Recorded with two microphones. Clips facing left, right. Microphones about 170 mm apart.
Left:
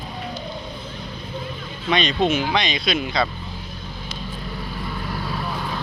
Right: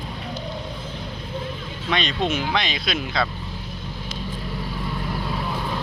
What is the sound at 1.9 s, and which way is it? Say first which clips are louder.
Speech: left 4 dB; centre (ahead or behind).